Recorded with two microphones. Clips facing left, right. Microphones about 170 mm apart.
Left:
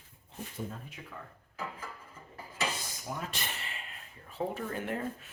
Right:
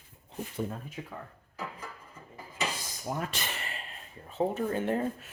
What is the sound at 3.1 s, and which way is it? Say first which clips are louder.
Speech: right 5 dB; 45° right (ahead or behind).